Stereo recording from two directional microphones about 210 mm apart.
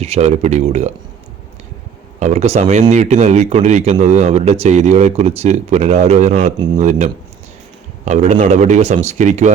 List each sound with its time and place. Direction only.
0.0 s speech: 30° right (ahead or behind)
2.1 s speech: 30° right (ahead or behind)